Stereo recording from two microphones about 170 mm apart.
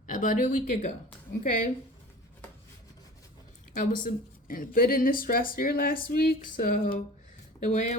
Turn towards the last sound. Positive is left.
turn(degrees=45)  # may be behind; listen again after turning